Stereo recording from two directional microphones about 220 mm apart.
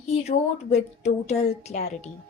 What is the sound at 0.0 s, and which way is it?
A woman's voice, 30° left (ahead or behind).